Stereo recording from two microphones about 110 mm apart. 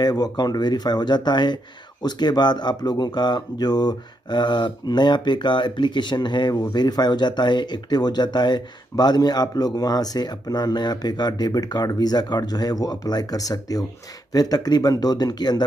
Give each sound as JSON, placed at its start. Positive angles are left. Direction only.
{"t": 0.0, "sound": "speech", "side_deg": 40}